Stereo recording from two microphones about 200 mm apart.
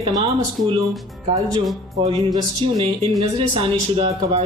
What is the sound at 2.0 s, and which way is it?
Speech, 20° right (ahead or behind).